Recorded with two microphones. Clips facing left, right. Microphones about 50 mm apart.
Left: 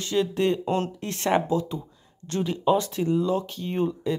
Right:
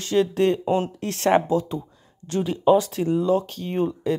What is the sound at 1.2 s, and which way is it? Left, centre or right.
Speech, right.